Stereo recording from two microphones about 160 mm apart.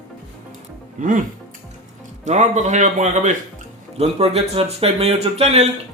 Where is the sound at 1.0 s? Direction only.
55° right (ahead or behind).